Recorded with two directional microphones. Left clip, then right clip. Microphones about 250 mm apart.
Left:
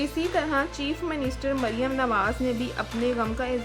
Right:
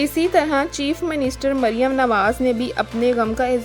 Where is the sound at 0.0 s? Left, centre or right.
Right.